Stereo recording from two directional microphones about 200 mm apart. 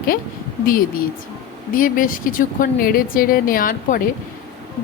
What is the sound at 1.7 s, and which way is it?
A woman's voice, 45° left (ahead or behind).